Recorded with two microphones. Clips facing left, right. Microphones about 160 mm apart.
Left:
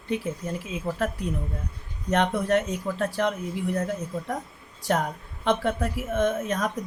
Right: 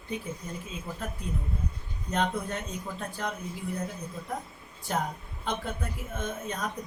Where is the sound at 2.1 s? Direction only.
85° left.